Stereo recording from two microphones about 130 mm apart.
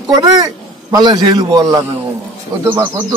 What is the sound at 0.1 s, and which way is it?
A man's voice, 30° right (ahead or behind).